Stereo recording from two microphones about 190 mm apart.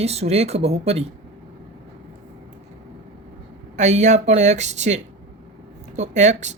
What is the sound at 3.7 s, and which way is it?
Speech, 35° right (ahead or behind).